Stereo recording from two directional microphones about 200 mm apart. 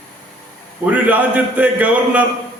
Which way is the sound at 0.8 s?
5° right (ahead or behind).